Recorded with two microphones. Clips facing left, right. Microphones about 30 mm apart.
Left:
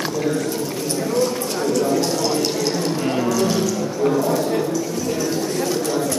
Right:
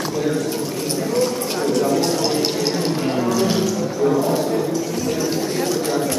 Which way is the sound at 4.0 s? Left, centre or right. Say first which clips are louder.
Right 1 dB; centre.